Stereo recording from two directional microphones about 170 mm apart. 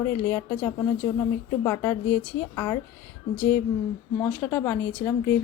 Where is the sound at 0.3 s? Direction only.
15° left (ahead or behind).